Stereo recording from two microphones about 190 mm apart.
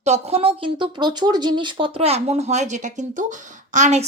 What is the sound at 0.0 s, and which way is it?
A woman's voice, 35° right (ahead or behind).